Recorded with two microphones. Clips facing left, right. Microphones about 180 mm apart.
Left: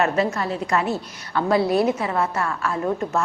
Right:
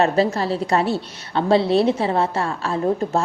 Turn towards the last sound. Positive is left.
turn(degrees=-30)  # may be behind; listen again after turning